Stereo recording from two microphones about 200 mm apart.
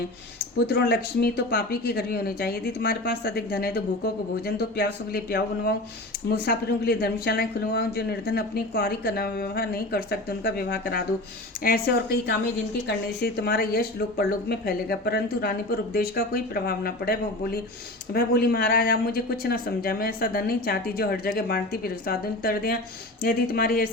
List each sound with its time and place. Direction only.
0.7 s speech: 55° left (ahead or behind)